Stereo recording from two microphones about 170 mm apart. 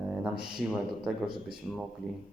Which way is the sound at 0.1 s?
5° right (ahead or behind).